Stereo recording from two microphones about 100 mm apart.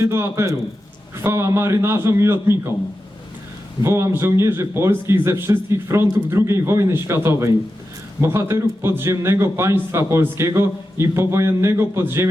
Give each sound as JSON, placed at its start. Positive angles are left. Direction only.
{"t": 0.0, "sound": "a man's voice", "side_deg": -25}
{"t": 3.8, "sound": "a man's voice", "side_deg": -25}